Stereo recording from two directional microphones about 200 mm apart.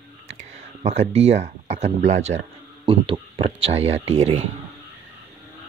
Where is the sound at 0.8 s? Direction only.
35° right (ahead or behind).